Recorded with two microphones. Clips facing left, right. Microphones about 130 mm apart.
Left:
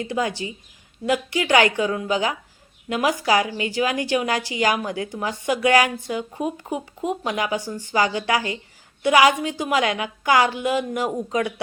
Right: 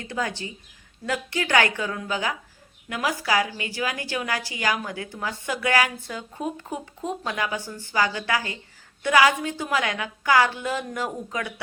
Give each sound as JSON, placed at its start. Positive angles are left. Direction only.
{"t": 0.0, "sound": "a woman's voice", "side_deg": 15}